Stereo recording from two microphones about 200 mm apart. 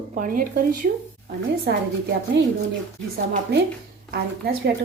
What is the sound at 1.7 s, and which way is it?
Speech, 55° right (ahead or behind).